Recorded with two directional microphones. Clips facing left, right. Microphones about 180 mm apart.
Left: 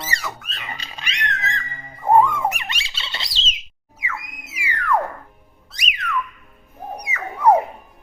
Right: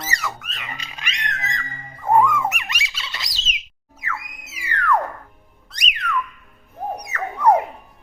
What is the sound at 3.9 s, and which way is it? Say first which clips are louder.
Music: even; 10° left (ahead or behind).